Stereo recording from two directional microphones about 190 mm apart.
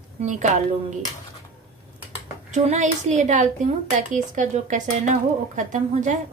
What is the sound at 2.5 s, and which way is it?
Speech, 35° right (ahead or behind).